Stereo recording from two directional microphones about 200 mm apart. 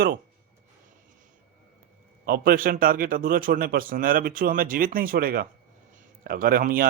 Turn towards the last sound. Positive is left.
turn(degrees=-45)  # may be behind; listen again after turning